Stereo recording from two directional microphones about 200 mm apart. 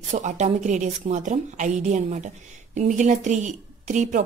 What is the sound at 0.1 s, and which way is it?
A woman's voice, 35° right (ahead or behind).